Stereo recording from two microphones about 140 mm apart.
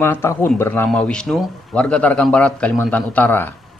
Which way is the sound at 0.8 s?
5° left (ahead or behind).